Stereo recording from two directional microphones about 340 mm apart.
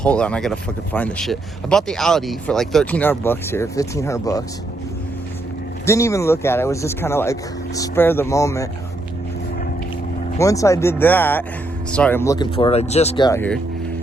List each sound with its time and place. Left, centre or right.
0.0 s speech: centre
5.8 s speech: centre
10.3 s speech: centre